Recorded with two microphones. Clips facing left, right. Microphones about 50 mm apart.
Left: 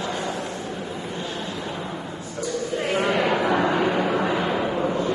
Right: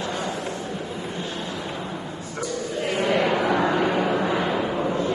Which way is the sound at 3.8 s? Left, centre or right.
Centre.